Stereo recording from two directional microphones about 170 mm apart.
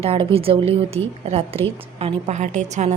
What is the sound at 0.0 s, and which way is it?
A woman's voice, 35° right (ahead or behind).